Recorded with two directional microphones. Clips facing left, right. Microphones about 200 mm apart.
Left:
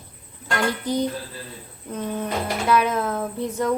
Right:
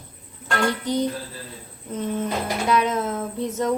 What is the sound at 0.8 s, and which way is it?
Speech, 20° right (ahead or behind).